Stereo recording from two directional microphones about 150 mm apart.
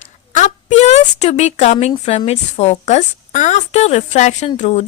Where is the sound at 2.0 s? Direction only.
45° left (ahead or behind).